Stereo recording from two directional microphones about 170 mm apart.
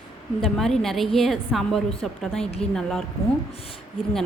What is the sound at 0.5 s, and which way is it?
A woman's voice, centre (ahead or behind).